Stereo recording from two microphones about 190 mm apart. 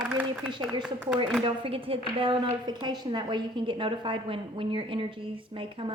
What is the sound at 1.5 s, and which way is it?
A woman's voice, 30° right (ahead or behind).